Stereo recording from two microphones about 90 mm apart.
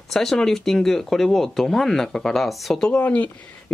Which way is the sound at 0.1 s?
5° left (ahead or behind).